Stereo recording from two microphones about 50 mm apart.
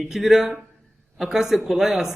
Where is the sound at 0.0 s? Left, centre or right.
Centre.